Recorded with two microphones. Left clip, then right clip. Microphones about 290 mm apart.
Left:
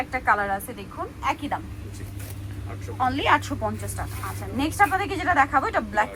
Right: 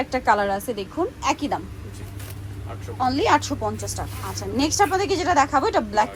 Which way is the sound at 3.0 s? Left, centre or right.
Centre.